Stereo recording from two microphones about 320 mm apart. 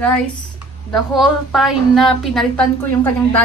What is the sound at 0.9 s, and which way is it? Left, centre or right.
A woman's voice, centre.